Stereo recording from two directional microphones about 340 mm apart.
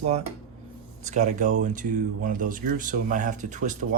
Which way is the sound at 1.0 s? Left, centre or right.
Right.